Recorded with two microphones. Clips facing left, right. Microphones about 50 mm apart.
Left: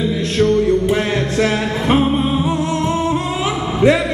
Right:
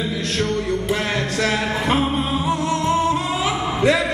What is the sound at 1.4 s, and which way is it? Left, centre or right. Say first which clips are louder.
Music: left 2 dB; left.